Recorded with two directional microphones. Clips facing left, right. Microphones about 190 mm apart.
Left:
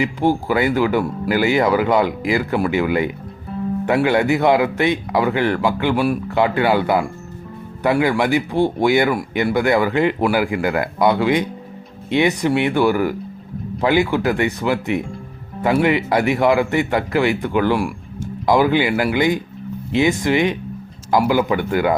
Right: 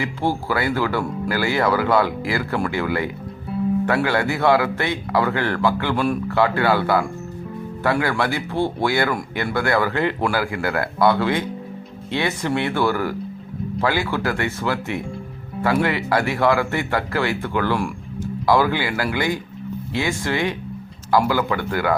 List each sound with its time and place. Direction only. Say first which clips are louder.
0.0 s speech: left 5 dB; 15° left (ahead or behind)